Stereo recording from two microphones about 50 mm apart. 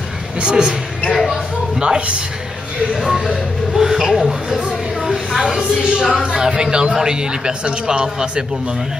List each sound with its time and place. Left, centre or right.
0.4 s speech: centre
1.1 s speech: centre
1.8 s speech: centre
3.0 s speech: centre